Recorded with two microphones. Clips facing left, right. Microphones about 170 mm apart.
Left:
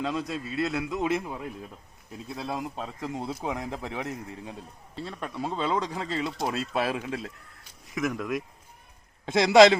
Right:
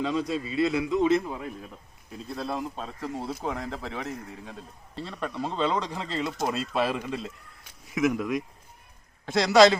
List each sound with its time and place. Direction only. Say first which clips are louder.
0.0 s a man's voice: right 3 dB; centre (ahead or behind)
9.2 s a man's voice: left 2 dB; 20° left (ahead or behind)